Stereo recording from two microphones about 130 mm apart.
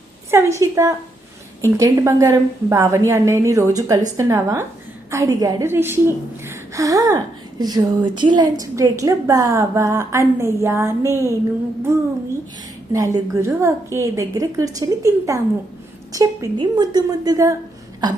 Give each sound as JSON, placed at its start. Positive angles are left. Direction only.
{"t": 0.3, "sound": "a woman's voice", "side_deg": -20}
{"t": 6.4, "sound": "gasp", "side_deg": -25}
{"t": 7.6, "sound": "a woman's voice", "side_deg": -30}
{"t": 12.9, "sound": "a woman's voice", "side_deg": -25}